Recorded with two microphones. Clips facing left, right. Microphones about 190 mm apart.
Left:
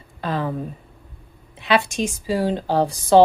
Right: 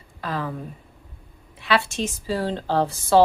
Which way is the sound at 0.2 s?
25° left (ahead or behind).